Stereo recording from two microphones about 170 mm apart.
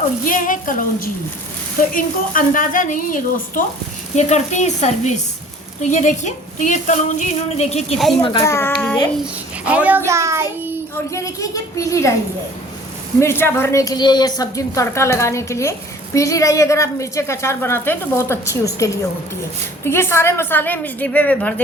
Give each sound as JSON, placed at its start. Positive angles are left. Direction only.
{"t": 0.3, "sound": "a woman's voice", "side_deg": 50}
{"t": 8.2, "sound": "a woman's voice", "side_deg": 25}
{"t": 8.5, "sound": "a child's voice", "side_deg": 15}
{"t": 9.2, "sound": "a child's voice", "side_deg": -5}
{"t": 10.1, "sound": "child singing", "side_deg": -15}
{"t": 11.1, "sound": "a woman's voice", "side_deg": 20}
{"t": 13.1, "sound": "a woman's voice", "side_deg": 15}